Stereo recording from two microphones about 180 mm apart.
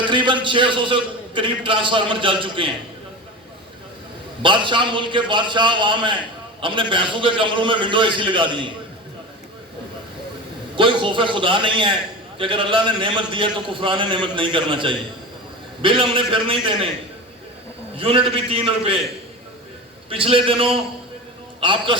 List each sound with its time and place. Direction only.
0.0 s a man's voice: 25° right (ahead or behind)
4.4 s a man's voice: 25° right (ahead or behind)
10.8 s a man's voice: 30° right (ahead or behind)
17.9 s a man's voice: 30° right (ahead or behind)
20.1 s a man's voice: 30° right (ahead or behind)